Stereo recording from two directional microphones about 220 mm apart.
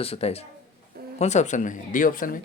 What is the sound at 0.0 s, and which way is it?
Speech, 25° left (ahead or behind).